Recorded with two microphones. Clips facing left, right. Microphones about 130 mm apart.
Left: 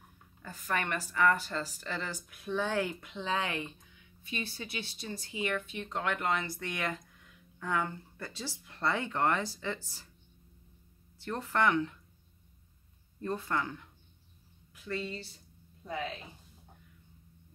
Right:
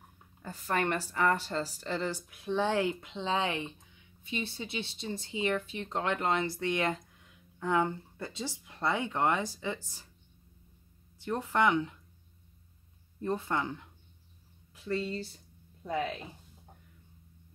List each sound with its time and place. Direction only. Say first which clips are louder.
0.4 s speech: right 3 dB; 30° right (ahead or behind); by 10.0 s 15° right (ahead or behind)
11.1 s speech: right 2 dB; 15° right (ahead or behind)
13.2 s speech: right 2 dB; 20° right (ahead or behind)